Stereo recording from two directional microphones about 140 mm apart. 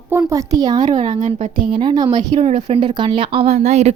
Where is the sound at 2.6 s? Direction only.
35° right (ahead or behind); by 3.9 s 50° right (ahead or behind).